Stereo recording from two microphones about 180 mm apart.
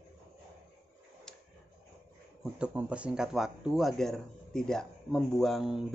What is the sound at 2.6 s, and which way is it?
Speech, 5° right (ahead or behind).